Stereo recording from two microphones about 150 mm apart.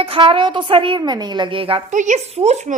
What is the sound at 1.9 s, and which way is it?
Speech, 55° right (ahead or behind).